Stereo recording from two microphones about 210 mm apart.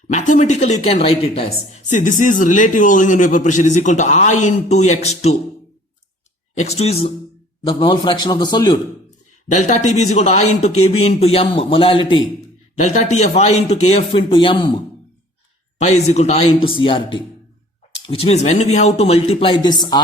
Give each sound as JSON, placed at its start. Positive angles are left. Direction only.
{"t": 0.1, "sound": "speech", "side_deg": 35}
{"t": 6.5, "sound": "a man's voice", "side_deg": 30}
{"t": 9.5, "sound": "a man's voice", "side_deg": 35}
{"t": 15.8, "sound": "a man's voice", "side_deg": 35}